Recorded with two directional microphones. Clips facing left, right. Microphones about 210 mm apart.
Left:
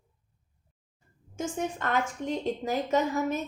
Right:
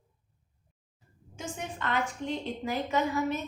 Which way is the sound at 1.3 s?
45° left (ahead or behind).